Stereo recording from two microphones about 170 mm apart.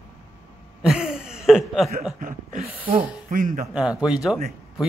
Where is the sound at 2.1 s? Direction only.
50° right (ahead or behind).